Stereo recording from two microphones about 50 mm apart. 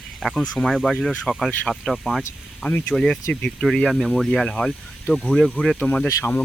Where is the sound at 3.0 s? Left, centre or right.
Centre.